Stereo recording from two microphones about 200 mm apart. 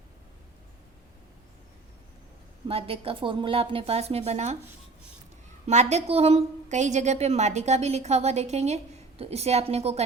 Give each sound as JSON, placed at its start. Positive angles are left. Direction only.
{"t": 2.6, "sound": "a woman's voice", "side_deg": -30}
{"t": 5.6, "sound": "a woman's voice", "side_deg": -35}